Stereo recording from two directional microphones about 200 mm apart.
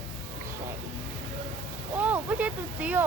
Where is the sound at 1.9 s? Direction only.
10° right (ahead or behind).